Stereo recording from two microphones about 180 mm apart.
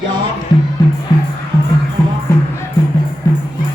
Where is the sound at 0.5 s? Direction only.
25° left (ahead or behind).